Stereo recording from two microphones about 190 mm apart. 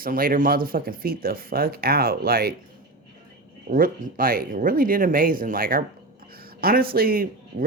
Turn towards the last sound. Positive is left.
turn(degrees=-50)  # may be behind; listen again after turning